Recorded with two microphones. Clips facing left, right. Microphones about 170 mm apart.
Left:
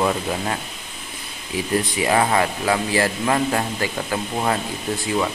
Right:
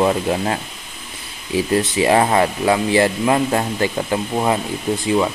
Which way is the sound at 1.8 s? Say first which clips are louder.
Right 4 dB; 30° right (ahead or behind).